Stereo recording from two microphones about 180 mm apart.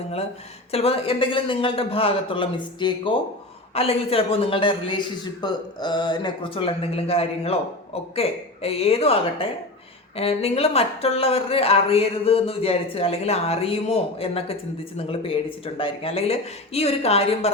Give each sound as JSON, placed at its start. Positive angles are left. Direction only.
{"t": 0.7, "sound": "a man's voice", "side_deg": 35}